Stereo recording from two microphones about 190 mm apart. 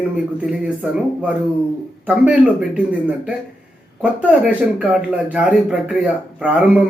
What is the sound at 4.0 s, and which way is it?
Speech, 5° right (ahead or behind).